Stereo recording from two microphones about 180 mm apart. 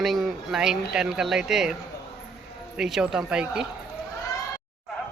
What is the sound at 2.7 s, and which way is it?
Speech, 5° right (ahead or behind).